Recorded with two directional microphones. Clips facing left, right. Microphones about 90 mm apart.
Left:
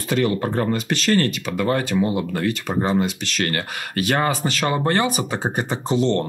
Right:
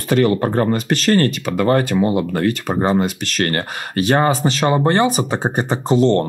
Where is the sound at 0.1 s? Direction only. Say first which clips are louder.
Right 5 dB; 50° right (ahead or behind).